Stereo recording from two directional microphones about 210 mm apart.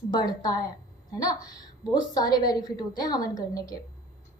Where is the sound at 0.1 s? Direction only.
20° left (ahead or behind).